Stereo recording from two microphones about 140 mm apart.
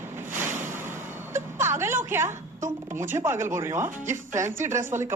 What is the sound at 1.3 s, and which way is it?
Vehicle, 20° right (ahead or behind).